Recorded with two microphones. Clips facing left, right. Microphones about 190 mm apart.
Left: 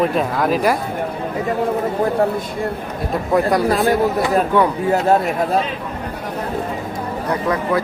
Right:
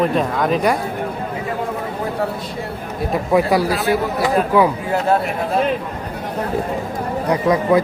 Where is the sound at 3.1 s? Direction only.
5° right (ahead or behind).